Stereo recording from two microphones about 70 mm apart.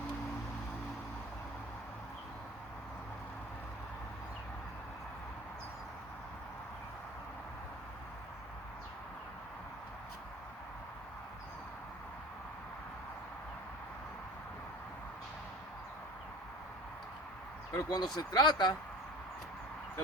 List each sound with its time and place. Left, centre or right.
17.7 s speech: left